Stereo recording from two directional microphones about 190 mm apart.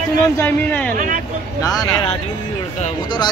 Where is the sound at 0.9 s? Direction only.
45° right (ahead or behind).